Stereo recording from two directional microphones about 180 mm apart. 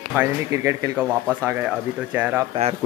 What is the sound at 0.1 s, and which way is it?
Speech, 10° right (ahead or behind).